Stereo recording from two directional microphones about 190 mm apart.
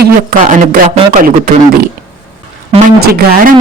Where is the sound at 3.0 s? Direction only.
50° right (ahead or behind).